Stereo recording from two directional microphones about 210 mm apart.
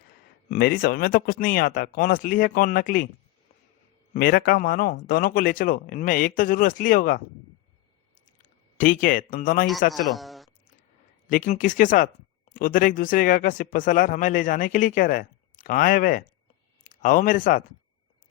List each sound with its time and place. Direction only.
0.4 s speech: 40° left (ahead or behind)
4.1 s speech: 40° left (ahead or behind)
8.2 s a sound: 40° left (ahead or behind)
9.9 s speech: centre (ahead or behind)
11.3 s speech: 40° left (ahead or behind)